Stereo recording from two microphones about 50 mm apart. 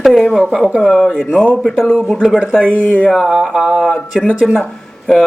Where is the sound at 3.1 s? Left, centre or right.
Centre.